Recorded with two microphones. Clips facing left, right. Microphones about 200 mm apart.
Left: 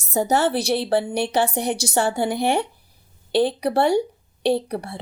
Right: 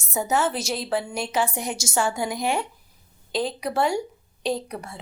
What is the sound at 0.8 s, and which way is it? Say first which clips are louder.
A woman's voice: left 6 dB; 30° left (ahead or behind).